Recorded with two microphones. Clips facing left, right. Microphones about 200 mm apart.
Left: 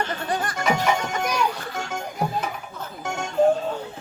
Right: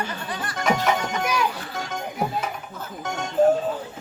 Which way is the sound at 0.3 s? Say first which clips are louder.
Left 6 dB; 45° left (ahead or behind).